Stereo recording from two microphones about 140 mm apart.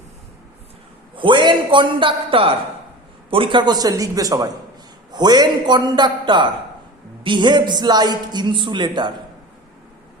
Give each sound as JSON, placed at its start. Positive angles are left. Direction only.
{"t": 1.1, "sound": "a man's voice", "side_deg": -35}